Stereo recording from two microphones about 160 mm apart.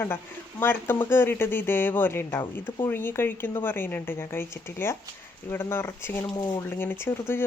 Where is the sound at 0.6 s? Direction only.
10° left (ahead or behind).